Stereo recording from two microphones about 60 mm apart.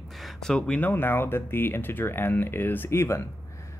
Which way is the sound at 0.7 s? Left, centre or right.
Left.